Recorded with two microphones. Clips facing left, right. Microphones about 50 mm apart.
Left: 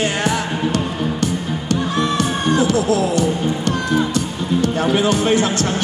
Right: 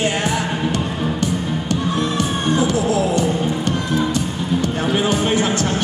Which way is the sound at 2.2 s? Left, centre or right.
Left.